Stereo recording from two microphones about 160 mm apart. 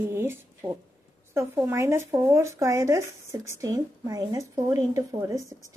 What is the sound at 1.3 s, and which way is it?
A woman's voice, 15° right (ahead or behind).